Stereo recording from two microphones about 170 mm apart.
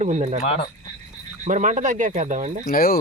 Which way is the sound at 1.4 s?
45° right (ahead or behind).